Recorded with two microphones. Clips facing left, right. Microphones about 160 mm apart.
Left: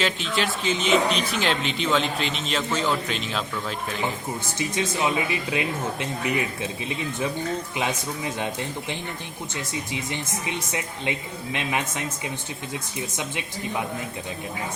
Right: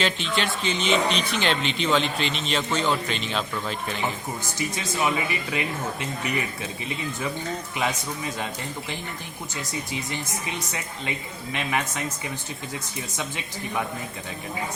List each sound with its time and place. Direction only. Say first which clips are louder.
0.0 s speech: even; centre (ahead or behind)
4.5 s speech: left 3 dB; 25° left (ahead or behind)
9.9 s speech: left 1 dB; 20° left (ahead or behind)